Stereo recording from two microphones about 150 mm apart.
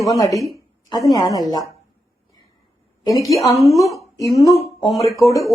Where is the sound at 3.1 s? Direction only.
Centre (ahead or behind).